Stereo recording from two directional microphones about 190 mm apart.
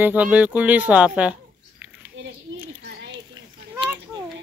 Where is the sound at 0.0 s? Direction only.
10° right (ahead or behind).